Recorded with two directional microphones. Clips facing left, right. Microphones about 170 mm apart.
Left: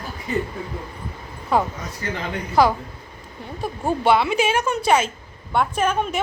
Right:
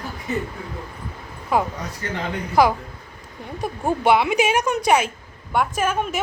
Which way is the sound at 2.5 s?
15° right (ahead or behind).